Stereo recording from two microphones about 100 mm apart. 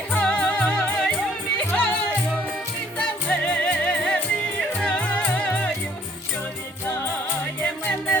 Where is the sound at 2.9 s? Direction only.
10° left (ahead or behind).